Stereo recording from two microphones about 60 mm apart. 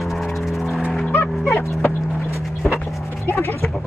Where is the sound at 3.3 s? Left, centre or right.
Left.